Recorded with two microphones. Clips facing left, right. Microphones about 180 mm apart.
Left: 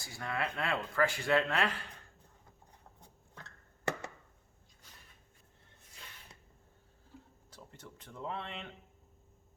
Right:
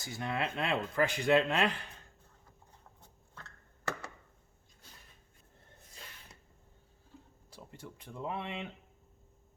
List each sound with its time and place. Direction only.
0.0 s speech: 20° right (ahead or behind)
7.5 s speech: 10° right (ahead or behind)